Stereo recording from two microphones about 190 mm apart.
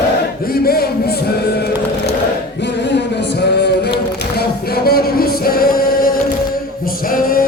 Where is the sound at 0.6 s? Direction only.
55° left (ahead or behind).